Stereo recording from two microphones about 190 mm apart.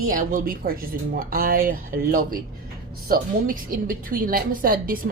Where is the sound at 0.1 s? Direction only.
45° right (ahead or behind).